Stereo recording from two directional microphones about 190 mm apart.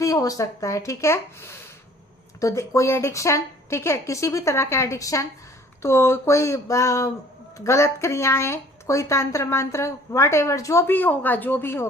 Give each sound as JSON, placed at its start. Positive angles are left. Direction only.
{"t": 0.0, "sound": "a woman's voice", "side_deg": 15}